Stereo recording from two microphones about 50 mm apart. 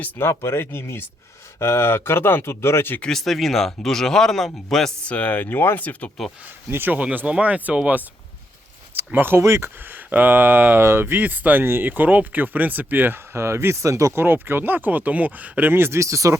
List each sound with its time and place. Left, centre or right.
0.2 s speech: left
3.1 s a man's voice: centre
5.0 s speech: left
5.8 s speech: left
6.7 s speech: right
6.9 s speech: right
9.1 s speech: right
9.4 s speech: right
9.8 s speech: right
13.3 s speech: right
14.2 s speech: right
15.7 s speech: right
16.0 s speech: right